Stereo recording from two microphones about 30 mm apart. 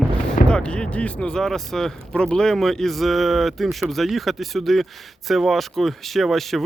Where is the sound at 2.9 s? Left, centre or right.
Centre.